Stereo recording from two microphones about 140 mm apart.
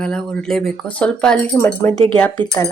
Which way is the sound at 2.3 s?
25° left (ahead or behind).